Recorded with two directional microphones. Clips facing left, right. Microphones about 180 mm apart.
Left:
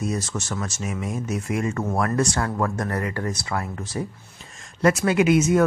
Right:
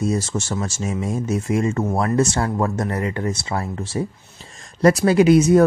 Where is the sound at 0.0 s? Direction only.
30° right (ahead or behind).